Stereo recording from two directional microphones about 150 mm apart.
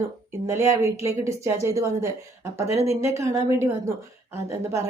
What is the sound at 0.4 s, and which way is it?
A woman's voice, 20° right (ahead or behind).